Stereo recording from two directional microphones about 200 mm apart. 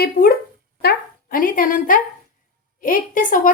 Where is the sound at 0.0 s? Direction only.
50° left (ahead or behind).